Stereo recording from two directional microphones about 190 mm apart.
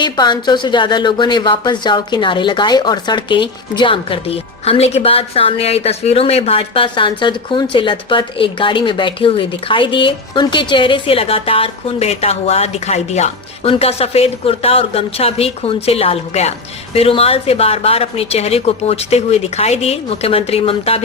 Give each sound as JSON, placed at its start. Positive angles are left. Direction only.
{"t": 0.0, "sound": "speech", "side_deg": 25}